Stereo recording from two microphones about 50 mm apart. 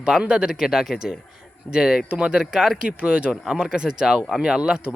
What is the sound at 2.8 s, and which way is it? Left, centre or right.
Speech, right.